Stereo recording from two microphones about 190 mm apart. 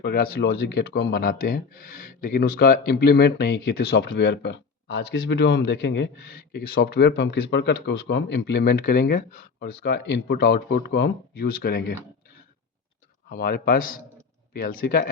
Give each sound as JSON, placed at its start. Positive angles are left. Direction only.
{"t": 0.0, "sound": "speech", "side_deg": 55}
{"t": 6.3, "sound": "speech", "side_deg": 50}
{"t": 13.3, "sound": "speech", "side_deg": 50}